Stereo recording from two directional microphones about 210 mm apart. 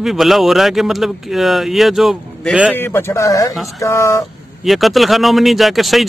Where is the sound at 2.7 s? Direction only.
10° left (ahead or behind).